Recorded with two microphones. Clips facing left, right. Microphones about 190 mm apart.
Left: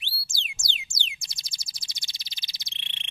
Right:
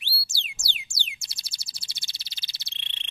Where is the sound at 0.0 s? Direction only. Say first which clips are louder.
Right 1 dB; 20° left (ahead or behind).